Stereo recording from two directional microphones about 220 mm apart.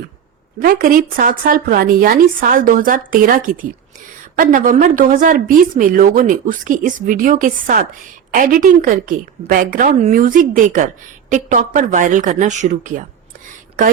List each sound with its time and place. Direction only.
0.6 s a woman's voice: 40° right (ahead or behind)